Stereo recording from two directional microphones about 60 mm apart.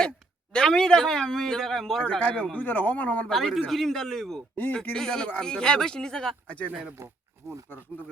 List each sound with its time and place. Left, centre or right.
0.5 s speech: centre
2.0 s a man's voice: left
3.2 s a man's voice: centre
4.5 s speech: left
4.8 s speech: centre
7.0 s speech: right